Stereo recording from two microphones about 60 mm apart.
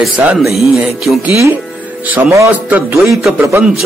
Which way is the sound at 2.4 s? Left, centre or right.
Right.